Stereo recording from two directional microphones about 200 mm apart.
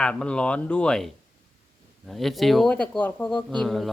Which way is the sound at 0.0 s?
5° left (ahead or behind).